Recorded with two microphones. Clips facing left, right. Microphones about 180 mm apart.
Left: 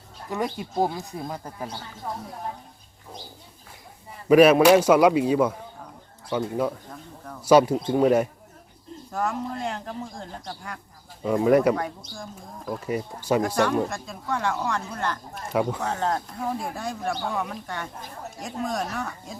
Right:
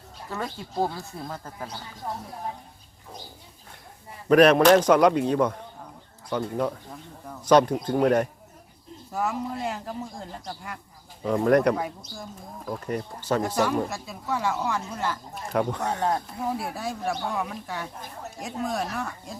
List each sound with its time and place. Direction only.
0.3 s speech: 15° left (ahead or behind)
4.3 s speech: 5° left (ahead or behind)
9.1 s speech: 5° right (ahead or behind)
13.8 s speech: 5° right (ahead or behind)
15.5 s speech: 5° left (ahead or behind)
15.8 s speech: 10° right (ahead or behind)